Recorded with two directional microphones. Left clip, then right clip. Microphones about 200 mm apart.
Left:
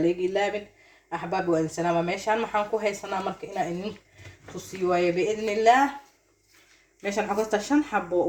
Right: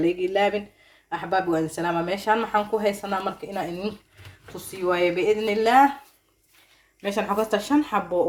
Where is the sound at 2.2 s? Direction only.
40° right (ahead or behind).